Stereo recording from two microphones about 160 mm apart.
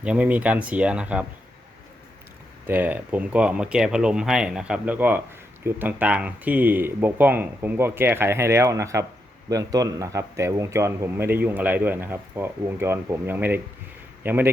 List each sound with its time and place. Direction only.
0.0 s speech: 10° right (ahead or behind)
2.6 s speech: 10° right (ahead or behind)